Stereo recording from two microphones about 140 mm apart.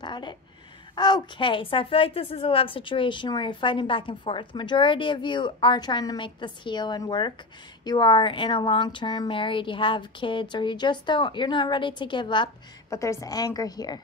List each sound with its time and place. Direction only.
0.0 s a sound: 30° left (ahead or behind)
0.9 s a woman's voice: 30° left (ahead or behind)
12.9 s a woman's voice: 20° left (ahead or behind)